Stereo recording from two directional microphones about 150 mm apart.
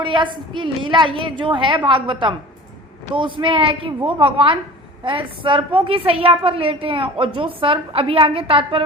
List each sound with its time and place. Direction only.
0.0 s a woman's voice: 35° right (ahead or behind)